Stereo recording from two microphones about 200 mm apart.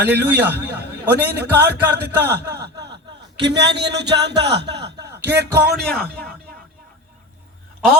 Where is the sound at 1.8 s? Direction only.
55° right (ahead or behind).